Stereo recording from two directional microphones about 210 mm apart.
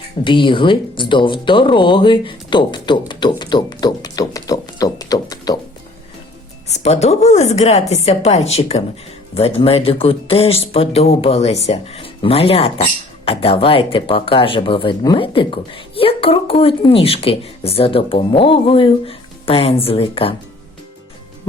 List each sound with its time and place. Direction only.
0.3 s speech: 25° left (ahead or behind)
6.7 s a woman's voice: 30° left (ahead or behind)